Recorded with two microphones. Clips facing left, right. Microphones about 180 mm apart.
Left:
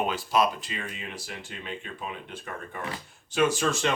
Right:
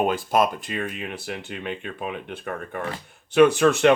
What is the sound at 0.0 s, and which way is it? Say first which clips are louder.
A man's voice: right 4 dB; 50° right (ahead or behind).